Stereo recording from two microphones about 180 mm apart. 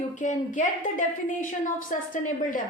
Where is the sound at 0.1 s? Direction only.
45° left (ahead or behind).